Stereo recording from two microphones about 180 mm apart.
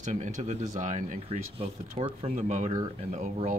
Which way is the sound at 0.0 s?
40° right (ahead or behind).